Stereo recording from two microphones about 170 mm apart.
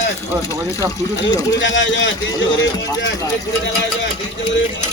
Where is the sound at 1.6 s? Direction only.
90° left.